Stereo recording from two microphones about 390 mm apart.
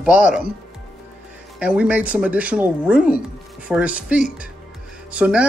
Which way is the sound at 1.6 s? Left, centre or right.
Centre.